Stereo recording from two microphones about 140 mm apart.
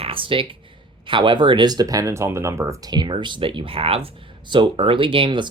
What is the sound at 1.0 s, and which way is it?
Speech, 35° right (ahead or behind).